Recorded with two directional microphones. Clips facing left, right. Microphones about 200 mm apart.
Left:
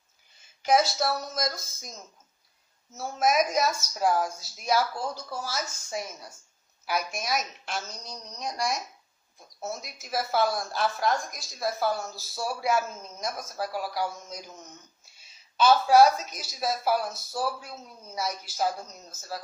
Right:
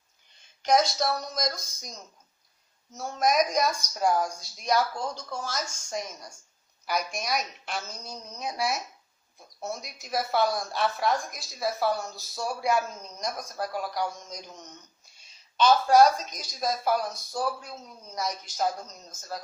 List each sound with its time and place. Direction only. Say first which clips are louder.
0.3 s a woman's voice: even; 5° left (ahead or behind)